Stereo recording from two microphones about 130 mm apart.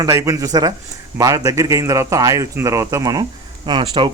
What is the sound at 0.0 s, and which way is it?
Speech, 25° right (ahead or behind).